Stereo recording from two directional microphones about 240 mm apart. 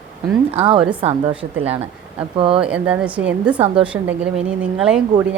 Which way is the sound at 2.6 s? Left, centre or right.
Centre.